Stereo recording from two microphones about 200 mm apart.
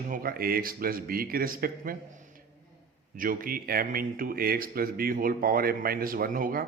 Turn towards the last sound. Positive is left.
turn(degrees=-45)  # may be behind; listen again after turning